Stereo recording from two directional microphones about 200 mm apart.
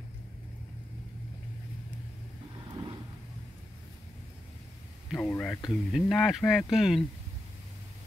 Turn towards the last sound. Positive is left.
turn(degrees=0)  # may be behind; listen again after turning